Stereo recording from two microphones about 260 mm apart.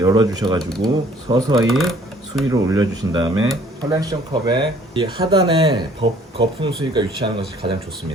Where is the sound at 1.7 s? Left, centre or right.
Centre.